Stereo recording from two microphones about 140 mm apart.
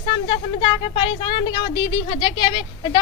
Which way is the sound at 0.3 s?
40° left (ahead or behind).